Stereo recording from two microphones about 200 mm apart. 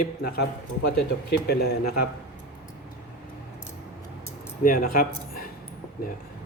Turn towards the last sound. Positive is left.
turn(degrees=45)  # may be behind; listen again after turning